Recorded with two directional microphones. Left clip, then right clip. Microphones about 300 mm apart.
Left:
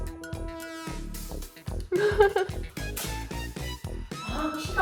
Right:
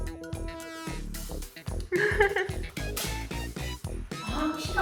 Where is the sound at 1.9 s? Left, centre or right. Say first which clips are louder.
Left 3 dB; centre.